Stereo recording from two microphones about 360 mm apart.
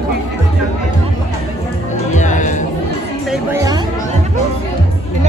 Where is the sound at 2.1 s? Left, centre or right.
Centre.